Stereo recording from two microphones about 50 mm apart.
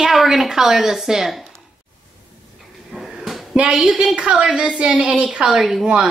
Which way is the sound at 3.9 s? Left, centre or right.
Right.